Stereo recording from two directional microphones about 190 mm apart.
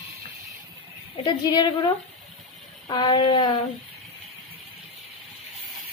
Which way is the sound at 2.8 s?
25° left (ahead or behind).